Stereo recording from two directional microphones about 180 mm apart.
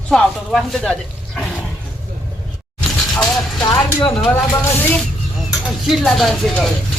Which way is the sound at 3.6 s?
20° left (ahead or behind).